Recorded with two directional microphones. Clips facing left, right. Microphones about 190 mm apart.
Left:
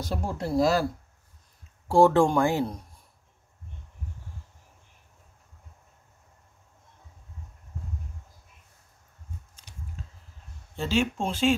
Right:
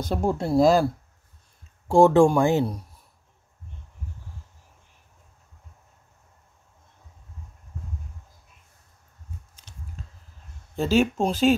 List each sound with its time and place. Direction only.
0.1 s speech: 30° right (ahead or behind)
1.9 s speech: 15° right (ahead or behind)
9.7 s a sound: 10° left (ahead or behind)
10.8 s speech: 40° right (ahead or behind)